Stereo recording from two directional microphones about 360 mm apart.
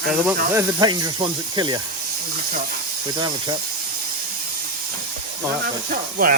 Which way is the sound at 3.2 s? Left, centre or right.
Centre.